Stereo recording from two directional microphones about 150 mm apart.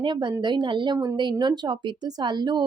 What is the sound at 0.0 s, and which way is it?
Speech, 30° right (ahead or behind).